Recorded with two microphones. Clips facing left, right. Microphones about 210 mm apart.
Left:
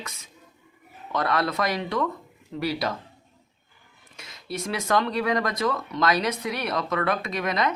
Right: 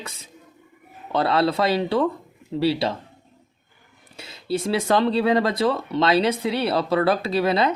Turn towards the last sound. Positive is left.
turn(degrees=-30)  # may be behind; listen again after turning